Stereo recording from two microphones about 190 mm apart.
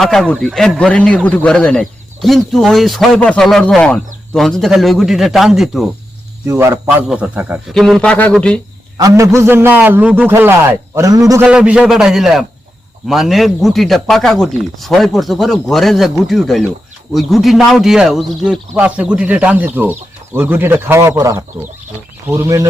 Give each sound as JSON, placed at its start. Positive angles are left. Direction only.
{"t": 0.0, "sound": "a man's voice", "side_deg": 0}
{"t": 6.5, "sound": "a man's voice", "side_deg": -15}
{"t": 9.0, "sound": "a man's voice", "side_deg": -15}